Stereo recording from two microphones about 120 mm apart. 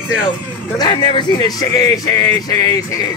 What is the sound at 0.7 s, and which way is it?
Music, 40° left (ahead or behind).